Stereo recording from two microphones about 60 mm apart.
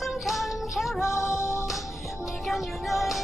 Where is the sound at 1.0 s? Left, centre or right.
Left.